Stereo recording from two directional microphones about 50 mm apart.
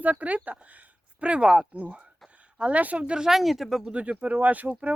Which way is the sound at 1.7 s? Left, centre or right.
Right.